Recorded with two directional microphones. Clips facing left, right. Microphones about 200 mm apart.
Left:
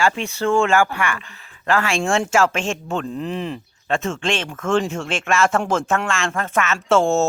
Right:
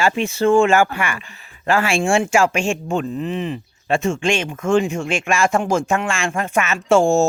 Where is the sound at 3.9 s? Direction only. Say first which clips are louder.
Right 3 dB; 10° right (ahead or behind).